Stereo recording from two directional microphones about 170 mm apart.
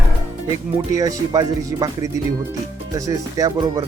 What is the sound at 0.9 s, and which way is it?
Speech, 20° right (ahead or behind).